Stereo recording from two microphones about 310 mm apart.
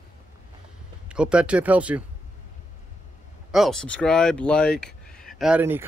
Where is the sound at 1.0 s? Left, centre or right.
Centre.